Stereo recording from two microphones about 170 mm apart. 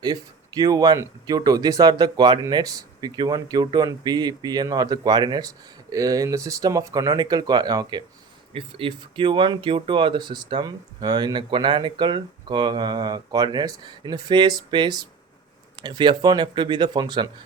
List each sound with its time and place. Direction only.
0.0 s speech: 20° right (ahead or behind)